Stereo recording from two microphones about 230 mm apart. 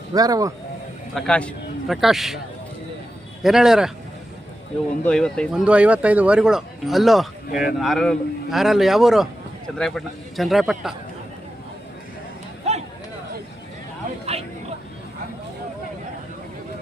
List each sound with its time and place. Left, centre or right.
0.1 s speech: centre
1.1 s speech: centre
3.4 s speech: centre
5.0 s speech: centre
12.7 s a sound: right